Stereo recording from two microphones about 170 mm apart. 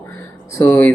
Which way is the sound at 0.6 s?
15° left (ahead or behind).